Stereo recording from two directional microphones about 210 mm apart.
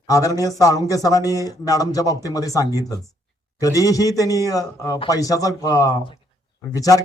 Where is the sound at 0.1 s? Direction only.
15° left (ahead or behind).